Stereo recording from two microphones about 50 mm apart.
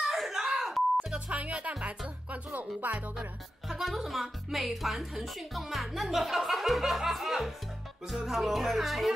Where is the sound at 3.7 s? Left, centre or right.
Centre.